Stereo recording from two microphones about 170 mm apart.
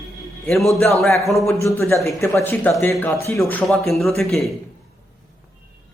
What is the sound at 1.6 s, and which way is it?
Speech, 15° left (ahead or behind).